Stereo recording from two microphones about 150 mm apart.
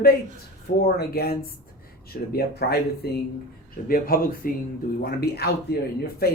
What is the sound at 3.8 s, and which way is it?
Speech, 75° left (ahead or behind).